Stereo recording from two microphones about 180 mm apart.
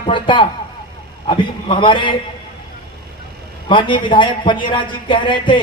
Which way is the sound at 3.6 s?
25° left (ahead or behind).